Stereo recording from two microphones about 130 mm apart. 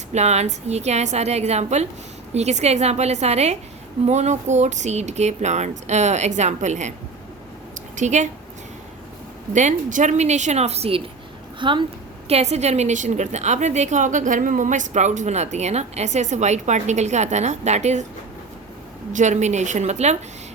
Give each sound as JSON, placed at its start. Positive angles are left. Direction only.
{"t": 0.1, "sound": "a woman's voice", "side_deg": -60}
{"t": 7.9, "sound": "a woman's voice", "side_deg": -65}
{"t": 9.5, "sound": "a woman's voice", "side_deg": -70}
{"t": 12.3, "sound": "a woman's voice", "side_deg": -55}
{"t": 19.1, "sound": "a woman's voice", "side_deg": -65}